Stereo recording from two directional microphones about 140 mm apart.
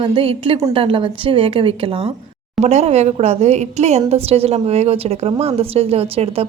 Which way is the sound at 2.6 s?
50° right (ahead or behind).